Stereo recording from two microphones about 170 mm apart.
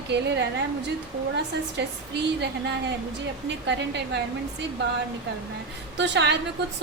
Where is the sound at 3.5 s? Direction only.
90° right.